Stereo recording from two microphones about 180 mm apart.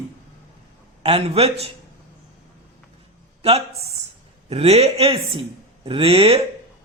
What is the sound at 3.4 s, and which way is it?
Speech, 35° right (ahead or behind).